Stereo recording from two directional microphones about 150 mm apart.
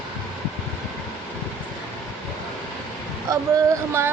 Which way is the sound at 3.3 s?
20° right (ahead or behind).